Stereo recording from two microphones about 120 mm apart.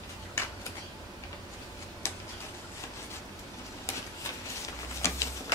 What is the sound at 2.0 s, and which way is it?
Tick-tock, 25° left (ahead or behind).